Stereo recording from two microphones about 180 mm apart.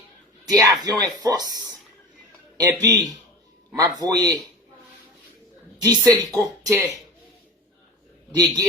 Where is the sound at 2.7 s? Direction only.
20° right (ahead or behind).